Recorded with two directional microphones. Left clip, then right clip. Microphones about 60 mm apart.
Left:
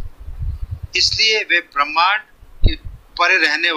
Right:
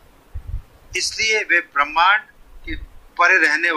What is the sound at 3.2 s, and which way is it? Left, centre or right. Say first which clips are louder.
Speech: even; left.